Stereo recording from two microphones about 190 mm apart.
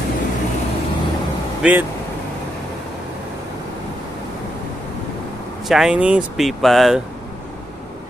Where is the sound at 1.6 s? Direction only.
10° right (ahead or behind).